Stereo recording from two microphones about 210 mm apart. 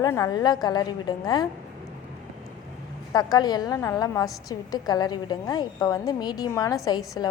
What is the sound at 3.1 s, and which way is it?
A woman's voice, 20° left (ahead or behind).